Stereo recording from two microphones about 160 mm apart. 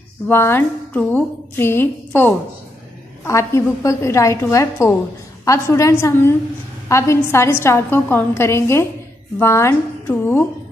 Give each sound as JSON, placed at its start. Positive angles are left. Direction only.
{"t": 0.3, "sound": "a woman's voice", "side_deg": 15}